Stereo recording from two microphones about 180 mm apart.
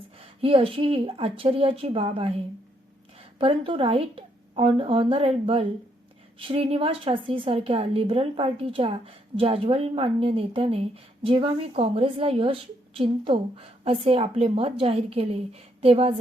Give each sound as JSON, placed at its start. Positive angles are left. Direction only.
{"t": 0.4, "sound": "a woman's voice", "side_deg": -30}